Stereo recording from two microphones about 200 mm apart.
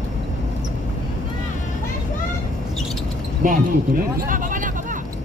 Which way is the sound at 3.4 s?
45° right (ahead or behind).